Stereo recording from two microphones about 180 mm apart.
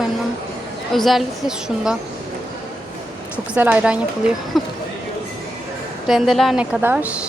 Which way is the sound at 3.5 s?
5° right (ahead or behind).